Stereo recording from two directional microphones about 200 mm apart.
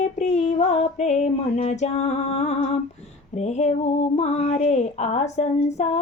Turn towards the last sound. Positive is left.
turn(degrees=35)  # may be behind; listen again after turning